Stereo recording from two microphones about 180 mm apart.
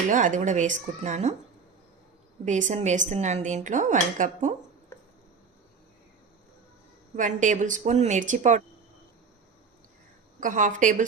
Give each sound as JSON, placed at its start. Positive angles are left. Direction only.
{"t": 0.1, "sound": "speech", "side_deg": -45}
{"t": 2.4, "sound": "speech", "side_deg": -40}
{"t": 7.2, "sound": "speech", "side_deg": -45}
{"t": 10.4, "sound": "speech", "side_deg": -45}